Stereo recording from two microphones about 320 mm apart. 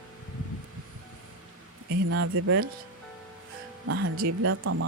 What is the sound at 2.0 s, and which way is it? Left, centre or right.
Speech, right.